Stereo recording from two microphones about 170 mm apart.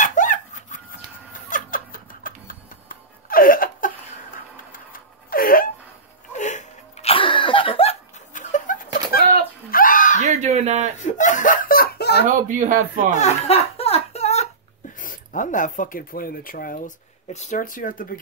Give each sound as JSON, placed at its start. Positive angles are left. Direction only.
{"t": 0.0, "sound": "dog", "side_deg": 50}
{"t": 1.5, "sound": "music", "side_deg": 55}
{"t": 4.7, "sound": "a sound", "side_deg": 55}
{"t": 6.3, "sound": "a sound", "side_deg": 45}
{"t": 10.2, "sound": "a sound", "side_deg": -45}
{"t": 11.0, "sound": "laughter", "side_deg": 45}
{"t": 12.3, "sound": "speech", "side_deg": -50}
{"t": 13.1, "sound": "laughter", "side_deg": 40}
{"t": 15.0, "sound": "speech", "side_deg": 50}